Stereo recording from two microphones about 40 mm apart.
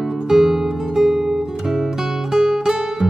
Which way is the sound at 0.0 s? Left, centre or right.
Centre.